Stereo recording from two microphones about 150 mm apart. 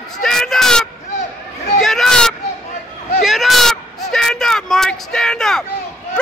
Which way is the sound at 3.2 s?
Centre (ahead or behind).